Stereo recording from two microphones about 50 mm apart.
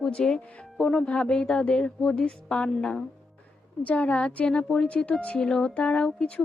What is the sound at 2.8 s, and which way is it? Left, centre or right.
Speech, centre.